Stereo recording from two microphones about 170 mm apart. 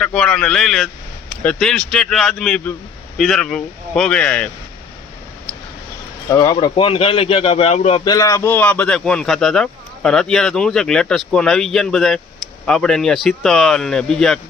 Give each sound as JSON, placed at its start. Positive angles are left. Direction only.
{"t": 0.0, "sound": "a man's voice", "side_deg": 5}
{"t": 6.2, "sound": "speech", "side_deg": 20}
{"t": 8.0, "sound": "a man's voice", "side_deg": 20}